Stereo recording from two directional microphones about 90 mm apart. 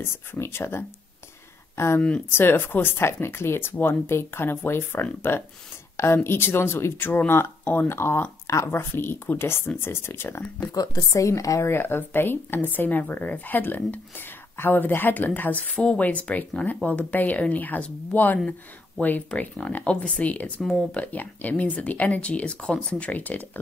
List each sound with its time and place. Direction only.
0.0 s speech: 25° left (ahead or behind)
2.0 s speech: 15° left (ahead or behind)
2.3 s speech: 25° left (ahead or behind)
10.7 s speech: 40° left (ahead or behind); by 23.6 s 20° left (ahead or behind)